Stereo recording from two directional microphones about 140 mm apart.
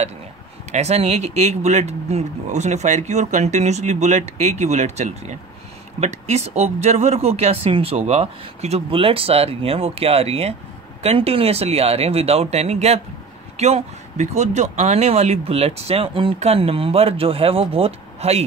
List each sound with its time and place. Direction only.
0.7 s speech: 50° right (ahead or behind)